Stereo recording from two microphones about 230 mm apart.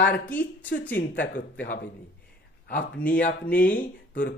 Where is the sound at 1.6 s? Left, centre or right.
Left.